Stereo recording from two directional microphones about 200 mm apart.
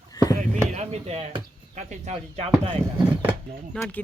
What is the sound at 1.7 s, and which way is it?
Speech, 35° right (ahead or behind).